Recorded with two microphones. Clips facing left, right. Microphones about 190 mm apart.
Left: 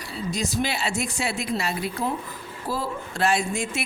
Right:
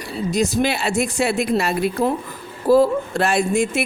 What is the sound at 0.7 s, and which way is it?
A woman's voice, 65° right (ahead or behind).